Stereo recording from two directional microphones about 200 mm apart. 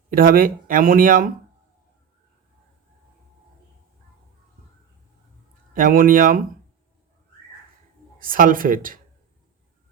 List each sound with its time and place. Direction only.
0.1 s speech: 45° right (ahead or behind)
5.7 s speech: 45° right (ahead or behind)
8.2 s speech: 45° right (ahead or behind)